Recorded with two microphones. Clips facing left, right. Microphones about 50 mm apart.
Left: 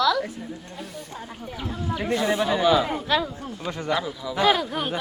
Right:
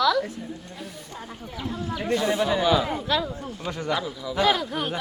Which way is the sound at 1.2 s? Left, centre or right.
Centre.